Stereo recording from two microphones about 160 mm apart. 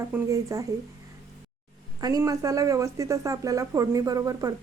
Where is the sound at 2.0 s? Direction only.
20° right (ahead or behind).